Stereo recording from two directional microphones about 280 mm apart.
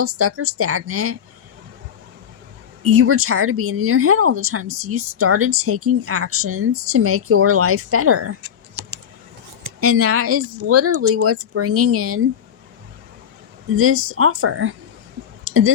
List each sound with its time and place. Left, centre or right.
0.0 s speech: right
2.8 s speech: right
9.8 s speech: right
13.7 s speech: right
15.4 s clicking: right